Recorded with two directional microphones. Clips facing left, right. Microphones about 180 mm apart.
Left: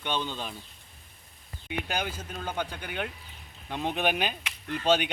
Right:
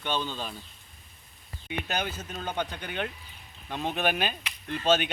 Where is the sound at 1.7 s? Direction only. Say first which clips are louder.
Even; 10° left (ahead or behind).